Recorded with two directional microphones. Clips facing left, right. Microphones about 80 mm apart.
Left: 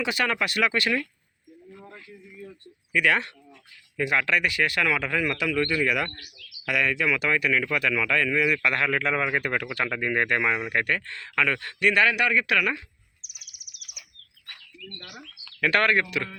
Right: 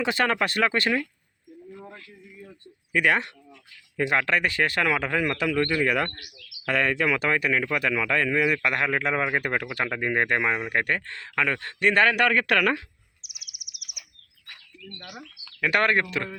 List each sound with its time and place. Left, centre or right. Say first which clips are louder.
0.0 s speech: right 2 dB; right
2.9 s speech: right 1 dB; right
3.9 s speech: right 1 dB; right
14.8 s speech: right 2 dB; right